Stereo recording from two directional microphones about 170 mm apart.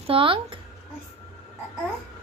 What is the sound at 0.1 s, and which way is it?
Speech, 30° right (ahead or behind).